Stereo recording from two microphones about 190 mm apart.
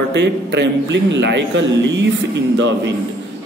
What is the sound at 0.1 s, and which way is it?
A man's voice, 65° right (ahead or behind).